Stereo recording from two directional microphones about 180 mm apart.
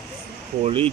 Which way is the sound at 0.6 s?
30° right (ahead or behind).